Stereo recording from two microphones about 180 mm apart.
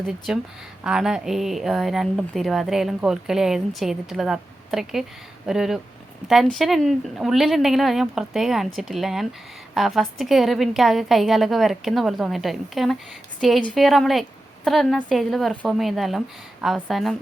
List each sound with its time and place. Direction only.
0.3 s a woman's voice: 5° right (ahead or behind)